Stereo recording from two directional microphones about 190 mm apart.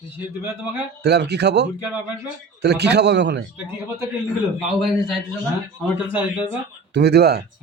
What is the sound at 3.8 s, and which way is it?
Speech, 15° right (ahead or behind).